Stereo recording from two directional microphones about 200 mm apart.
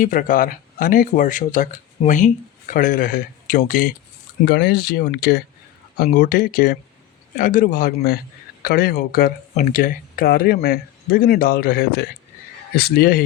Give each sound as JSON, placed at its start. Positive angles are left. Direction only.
{"t": 0.0, "sound": "speech", "side_deg": 45}
{"t": 4.4, "sound": "speech", "side_deg": 55}